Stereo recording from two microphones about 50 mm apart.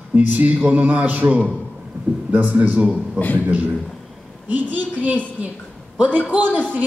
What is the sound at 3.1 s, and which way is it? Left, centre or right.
Speech, left.